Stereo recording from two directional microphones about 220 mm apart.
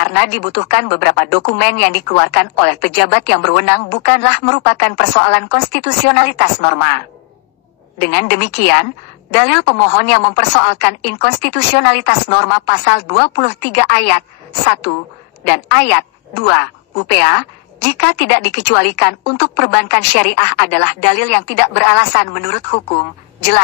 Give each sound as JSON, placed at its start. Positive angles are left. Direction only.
{"t": 0.0, "sound": "a woman's voice", "side_deg": 50}
{"t": 8.0, "sound": "a woman's voice", "side_deg": 45}
{"t": 15.4, "sound": "a woman's voice", "side_deg": 45}
{"t": 17.8, "sound": "a woman's voice", "side_deg": 50}
{"t": 21.8, "sound": "speech", "side_deg": 35}